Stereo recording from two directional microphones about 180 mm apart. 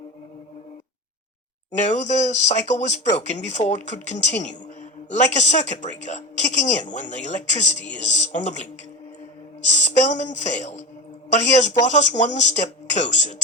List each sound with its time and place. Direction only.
1.8 s a man's voice: 40° left (ahead or behind)